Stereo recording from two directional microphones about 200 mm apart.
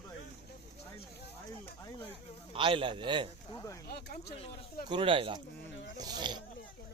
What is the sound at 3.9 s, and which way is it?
Speech, 55° left (ahead or behind).